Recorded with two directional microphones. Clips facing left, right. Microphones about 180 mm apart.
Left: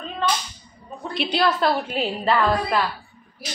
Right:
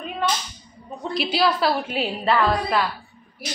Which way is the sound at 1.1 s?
Centre (ahead or behind).